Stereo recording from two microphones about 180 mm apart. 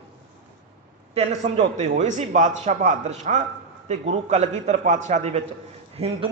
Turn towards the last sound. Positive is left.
turn(degrees=-35)  # may be behind; listen again after turning